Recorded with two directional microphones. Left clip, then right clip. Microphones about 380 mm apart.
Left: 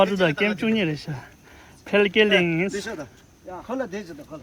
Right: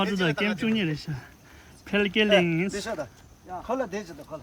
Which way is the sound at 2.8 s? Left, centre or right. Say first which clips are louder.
Right 1 dB; centre.